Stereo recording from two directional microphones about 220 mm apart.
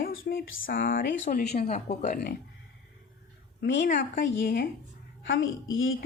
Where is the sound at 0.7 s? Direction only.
40° left (ahead or behind).